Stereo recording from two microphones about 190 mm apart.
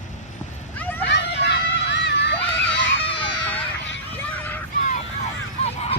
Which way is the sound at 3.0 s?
25° left (ahead or behind).